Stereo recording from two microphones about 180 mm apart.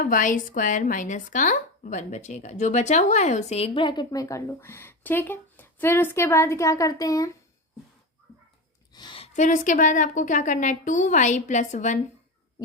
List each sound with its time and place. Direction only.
0.0 s speech: 45° left (ahead or behind); by 7.3 s 20° left (ahead or behind)
8.9 s a woman's voice: 25° left (ahead or behind); by 11.9 s 45° left (ahead or behind)